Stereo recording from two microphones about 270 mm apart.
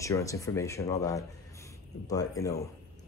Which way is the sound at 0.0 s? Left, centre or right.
Centre.